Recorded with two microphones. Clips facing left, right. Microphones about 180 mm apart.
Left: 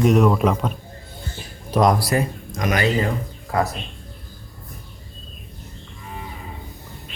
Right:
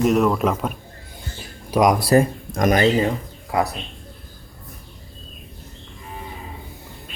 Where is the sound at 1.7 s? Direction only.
10° right (ahead or behind).